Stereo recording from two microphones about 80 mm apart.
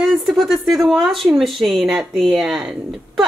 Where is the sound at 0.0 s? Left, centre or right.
Centre.